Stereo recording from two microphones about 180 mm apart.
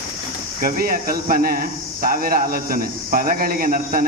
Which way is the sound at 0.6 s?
55° right (ahead or behind).